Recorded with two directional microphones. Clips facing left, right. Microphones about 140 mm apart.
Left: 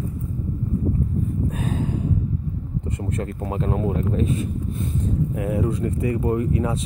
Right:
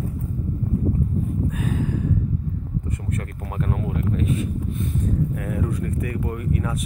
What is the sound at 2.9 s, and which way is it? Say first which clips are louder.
Speech: left 3 dB; 25° left (ahead or behind).